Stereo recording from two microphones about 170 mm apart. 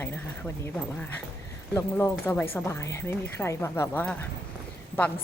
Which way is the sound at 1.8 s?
15° left (ahead or behind).